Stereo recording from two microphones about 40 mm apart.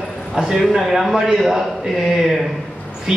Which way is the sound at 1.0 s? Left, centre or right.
Centre.